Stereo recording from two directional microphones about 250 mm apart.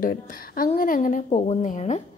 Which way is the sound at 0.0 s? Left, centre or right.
Left.